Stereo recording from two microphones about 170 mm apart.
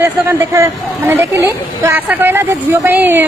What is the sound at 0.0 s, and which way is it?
A woman's voice, 15° right (ahead or behind).